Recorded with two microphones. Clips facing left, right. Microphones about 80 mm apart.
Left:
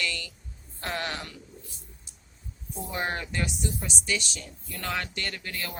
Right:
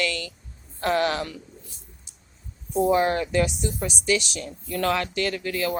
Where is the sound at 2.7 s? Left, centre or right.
Right.